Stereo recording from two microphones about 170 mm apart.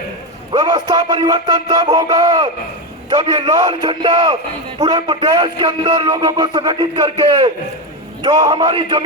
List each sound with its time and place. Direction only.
0.5 s speech: 25° right (ahead or behind)